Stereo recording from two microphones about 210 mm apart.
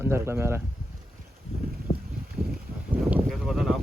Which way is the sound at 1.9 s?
30° left (ahead or behind).